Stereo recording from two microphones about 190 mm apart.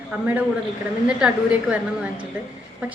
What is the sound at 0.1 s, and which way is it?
A woman's voice, 5° right (ahead or behind).